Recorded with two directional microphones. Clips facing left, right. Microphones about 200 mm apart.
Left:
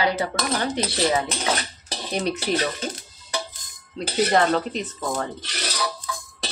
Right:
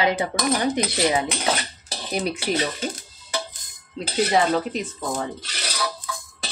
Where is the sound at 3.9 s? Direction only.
5° right (ahead or behind).